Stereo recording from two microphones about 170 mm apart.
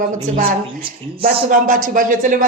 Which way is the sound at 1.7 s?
50° right (ahead or behind).